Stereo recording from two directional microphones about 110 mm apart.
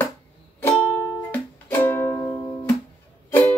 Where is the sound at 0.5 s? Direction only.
15° left (ahead or behind).